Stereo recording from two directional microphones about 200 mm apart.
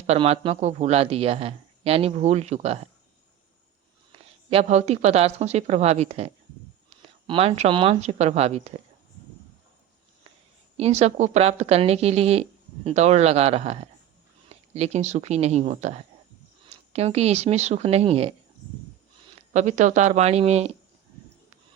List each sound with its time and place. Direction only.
0.1 s speech: 30° right (ahead or behind)
4.1 s speech: 30° right (ahead or behind)
10.8 s speech: 30° right (ahead or behind)
19.5 s speech: 35° right (ahead or behind)